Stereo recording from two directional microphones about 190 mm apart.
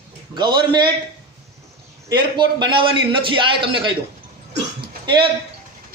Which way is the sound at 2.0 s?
25° right (ahead or behind).